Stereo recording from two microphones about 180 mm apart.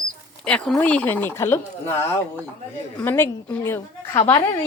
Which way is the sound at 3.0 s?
10° left (ahead or behind).